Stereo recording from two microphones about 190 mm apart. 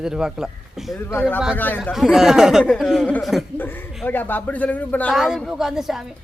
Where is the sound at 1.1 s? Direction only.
10° left (ahead or behind).